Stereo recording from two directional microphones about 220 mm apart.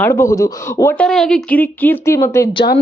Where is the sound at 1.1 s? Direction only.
Centre (ahead or behind); by 2.8 s 15° left (ahead or behind).